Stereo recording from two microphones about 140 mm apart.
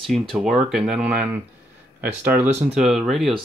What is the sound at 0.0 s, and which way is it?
Speech, centre (ahead or behind).